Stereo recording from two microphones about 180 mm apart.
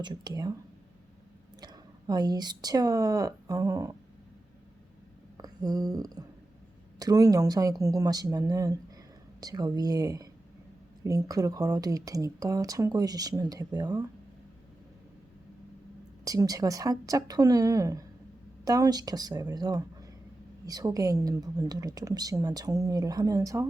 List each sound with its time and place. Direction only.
0.0 s speech: 20° right (ahead or behind)
1.6 s a woman's voice: 20° right (ahead or behind)
5.4 s a sound: 20° right (ahead or behind)
7.0 s speech: 20° right (ahead or behind)
16.2 s speech: 20° right (ahead or behind)